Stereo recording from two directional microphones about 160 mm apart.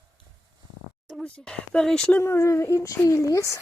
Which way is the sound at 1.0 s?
Centre (ahead or behind).